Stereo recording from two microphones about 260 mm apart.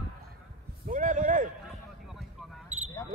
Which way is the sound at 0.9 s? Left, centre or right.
Right.